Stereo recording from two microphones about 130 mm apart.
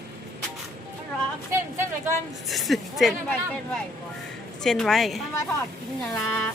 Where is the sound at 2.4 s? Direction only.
Centre (ahead or behind).